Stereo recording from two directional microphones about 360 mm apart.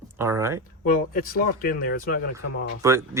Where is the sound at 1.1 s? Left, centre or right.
Left.